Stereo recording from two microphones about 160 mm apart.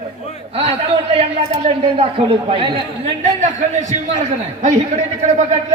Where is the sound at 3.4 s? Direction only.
50° right (ahead or behind).